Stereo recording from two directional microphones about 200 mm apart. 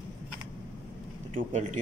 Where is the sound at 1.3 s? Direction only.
35° right (ahead or behind).